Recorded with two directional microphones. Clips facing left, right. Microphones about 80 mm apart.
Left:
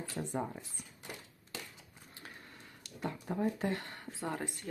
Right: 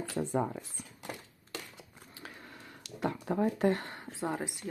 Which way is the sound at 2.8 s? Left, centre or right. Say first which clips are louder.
Right 6 dB; right.